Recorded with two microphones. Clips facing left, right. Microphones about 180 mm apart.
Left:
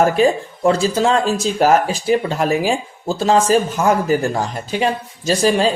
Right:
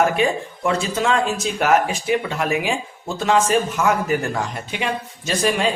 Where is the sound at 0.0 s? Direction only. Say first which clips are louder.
Left 4 dB; 35° left (ahead or behind).